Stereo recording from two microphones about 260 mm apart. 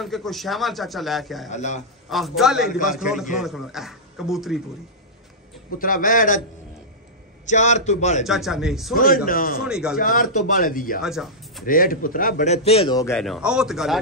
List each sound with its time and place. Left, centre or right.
0.0 s speech: centre
1.5 s a man's voice: left
2.0 s speech: centre
2.7 s a man's voice: left
3.0 s speech: centre
5.8 s a man's voice: left
7.4 s a man's voice: left
8.2 s speech: centre
8.9 s a man's voice: left
9.7 s speech: centre
9.9 s a man's voice: left
11.0 s speech: centre
11.6 s a man's voice: left; by 13.1 s centre
13.1 s speech: centre